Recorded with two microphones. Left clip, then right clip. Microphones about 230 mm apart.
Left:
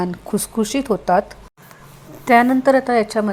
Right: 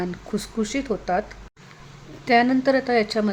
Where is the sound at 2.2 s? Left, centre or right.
Centre.